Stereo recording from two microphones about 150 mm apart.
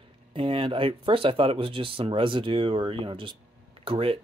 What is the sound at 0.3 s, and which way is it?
Speech, 35° right (ahead or behind).